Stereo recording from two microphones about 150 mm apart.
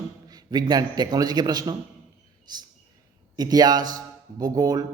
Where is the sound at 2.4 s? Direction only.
30° right (ahead or behind).